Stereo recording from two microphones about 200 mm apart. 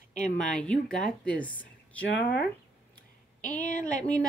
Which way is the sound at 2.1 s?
60° left (ahead or behind).